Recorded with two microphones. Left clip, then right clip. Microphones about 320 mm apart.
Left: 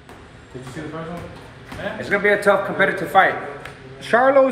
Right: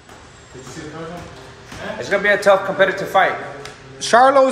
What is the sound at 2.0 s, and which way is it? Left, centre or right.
A man's voice, centre.